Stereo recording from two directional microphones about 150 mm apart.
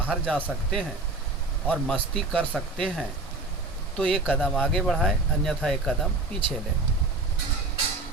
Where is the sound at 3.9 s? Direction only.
5° left (ahead or behind).